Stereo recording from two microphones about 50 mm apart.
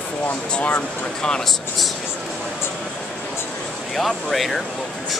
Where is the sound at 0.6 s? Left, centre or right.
Left.